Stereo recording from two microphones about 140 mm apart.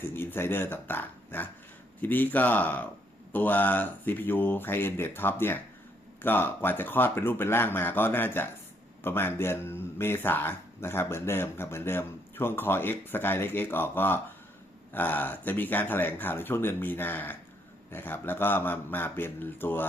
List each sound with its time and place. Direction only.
0.0 s speech: 15° left (ahead or behind)